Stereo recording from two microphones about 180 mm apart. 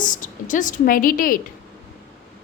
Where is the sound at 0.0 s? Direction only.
45° left (ahead or behind).